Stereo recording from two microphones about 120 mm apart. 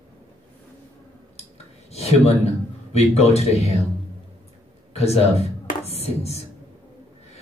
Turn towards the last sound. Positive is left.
turn(degrees=60)  # may be behind; listen again after turning